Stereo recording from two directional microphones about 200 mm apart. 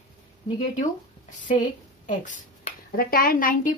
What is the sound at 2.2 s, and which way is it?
Speech, 40° left (ahead or behind).